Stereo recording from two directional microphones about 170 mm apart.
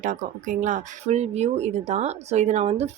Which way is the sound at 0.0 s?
50° right (ahead or behind).